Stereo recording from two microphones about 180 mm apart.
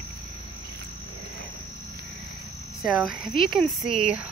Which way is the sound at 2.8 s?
5° right (ahead or behind).